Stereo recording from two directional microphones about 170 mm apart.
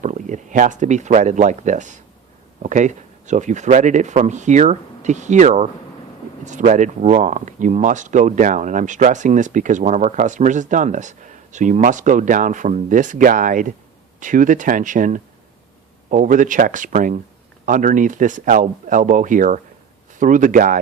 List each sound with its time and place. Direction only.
0.0 s speech: 45° right (ahead or behind)